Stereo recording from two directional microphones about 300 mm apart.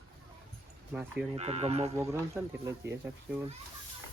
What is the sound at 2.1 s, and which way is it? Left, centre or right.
Speech, centre.